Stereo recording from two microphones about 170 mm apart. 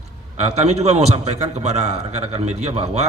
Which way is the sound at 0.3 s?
40° right (ahead or behind).